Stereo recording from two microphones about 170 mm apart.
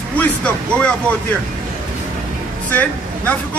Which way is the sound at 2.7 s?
10° left (ahead or behind).